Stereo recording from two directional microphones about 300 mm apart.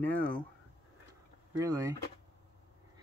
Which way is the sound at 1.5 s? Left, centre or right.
Centre.